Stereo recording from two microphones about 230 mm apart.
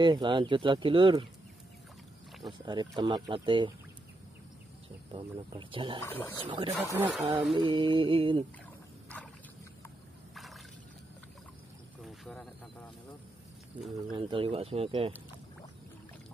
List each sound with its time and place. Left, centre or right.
0.0 s speech: centre
2.6 s speech: centre
5.1 s speech: right
6.0 s speech: centre
6.4 s speech: right
6.8 s speech: centre
7.5 s speech: right
10.3 s a sound: centre
12.0 s a sound: centre
14.1 s speech: right